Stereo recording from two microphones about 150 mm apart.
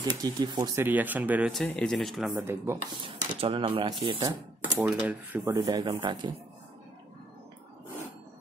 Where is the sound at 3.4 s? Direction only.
35° right (ahead or behind).